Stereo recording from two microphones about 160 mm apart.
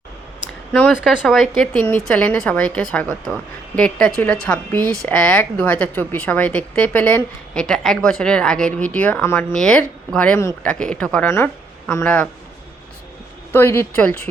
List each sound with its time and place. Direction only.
0.7 s a woman's voice: 5° left (ahead or behind)
13.5 s a woman's voice: 15° left (ahead or behind)